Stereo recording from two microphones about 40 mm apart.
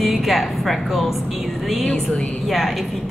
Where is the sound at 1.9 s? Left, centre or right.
Centre.